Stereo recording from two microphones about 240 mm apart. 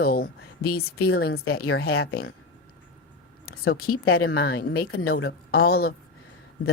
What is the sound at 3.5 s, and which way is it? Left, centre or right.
Speech, left.